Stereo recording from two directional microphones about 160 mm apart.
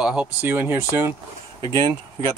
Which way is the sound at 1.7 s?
30° right (ahead or behind).